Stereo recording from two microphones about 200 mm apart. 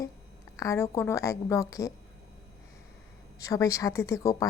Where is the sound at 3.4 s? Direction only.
15° left (ahead or behind).